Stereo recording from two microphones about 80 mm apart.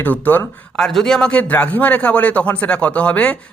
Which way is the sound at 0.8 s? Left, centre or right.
Centre.